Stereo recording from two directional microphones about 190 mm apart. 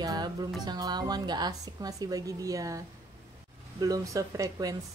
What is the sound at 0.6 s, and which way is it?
A woman's voice, 20° right (ahead or behind).